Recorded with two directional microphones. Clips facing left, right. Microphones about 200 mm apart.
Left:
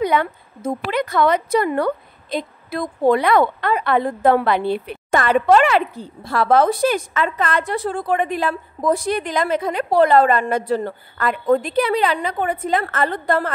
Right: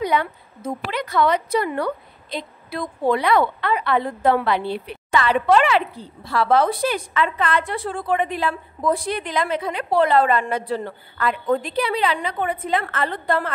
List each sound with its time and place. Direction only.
0.0 s a woman's voice: 55° left (ahead or behind)